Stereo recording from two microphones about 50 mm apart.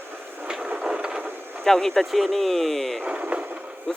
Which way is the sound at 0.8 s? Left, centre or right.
Centre.